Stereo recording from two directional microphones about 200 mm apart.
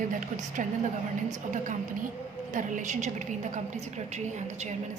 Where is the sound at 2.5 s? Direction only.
40° right (ahead or behind).